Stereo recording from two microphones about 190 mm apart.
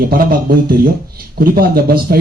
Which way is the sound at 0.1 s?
50° right (ahead or behind).